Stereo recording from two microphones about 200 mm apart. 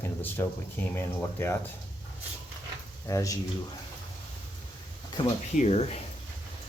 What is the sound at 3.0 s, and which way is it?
Speech, 15° left (ahead or behind).